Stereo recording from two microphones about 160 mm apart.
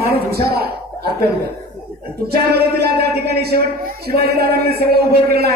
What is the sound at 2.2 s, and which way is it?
A man's voice, 80° right.